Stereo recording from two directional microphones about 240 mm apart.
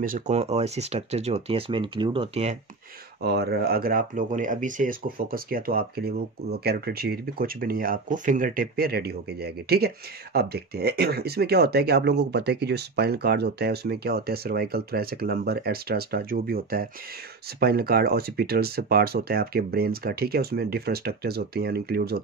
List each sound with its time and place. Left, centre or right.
0.0 s speech: right
3.2 s speech: right